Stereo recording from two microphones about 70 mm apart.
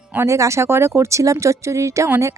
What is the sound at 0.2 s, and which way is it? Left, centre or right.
Speech, right.